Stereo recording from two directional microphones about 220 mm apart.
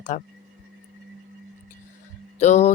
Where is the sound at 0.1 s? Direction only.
35° left (ahead or behind).